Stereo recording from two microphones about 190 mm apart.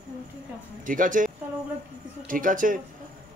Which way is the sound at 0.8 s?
45° right (ahead or behind).